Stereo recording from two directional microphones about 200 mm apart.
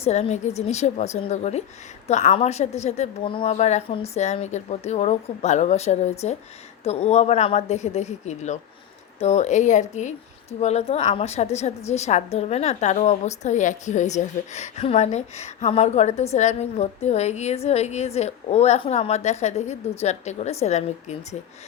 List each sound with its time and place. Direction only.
0.0 s a woman's voice: 35° left (ahead or behind)